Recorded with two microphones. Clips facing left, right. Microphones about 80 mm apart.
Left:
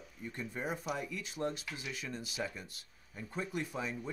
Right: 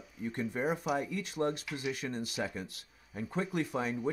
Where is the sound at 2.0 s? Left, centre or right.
Right.